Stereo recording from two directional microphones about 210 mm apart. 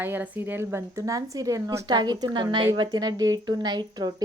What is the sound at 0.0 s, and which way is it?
Speech, 10° right (ahead or behind).